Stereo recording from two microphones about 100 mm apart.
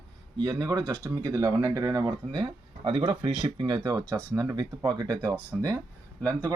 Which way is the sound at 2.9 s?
65° right (ahead or behind).